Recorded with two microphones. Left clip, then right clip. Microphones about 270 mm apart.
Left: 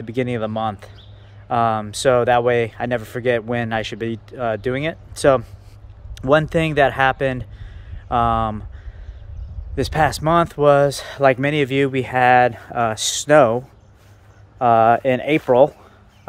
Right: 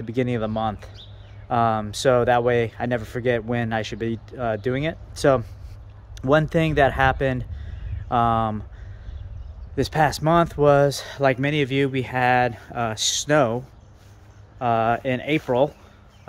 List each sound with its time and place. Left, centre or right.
0.0 s speech: centre
9.8 s speech: centre